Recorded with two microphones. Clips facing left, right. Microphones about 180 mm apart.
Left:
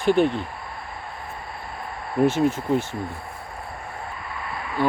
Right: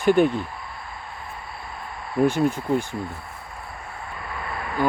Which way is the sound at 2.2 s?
Centre (ahead or behind).